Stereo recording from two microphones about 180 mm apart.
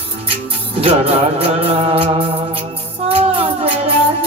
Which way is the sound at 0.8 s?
30° right (ahead or behind).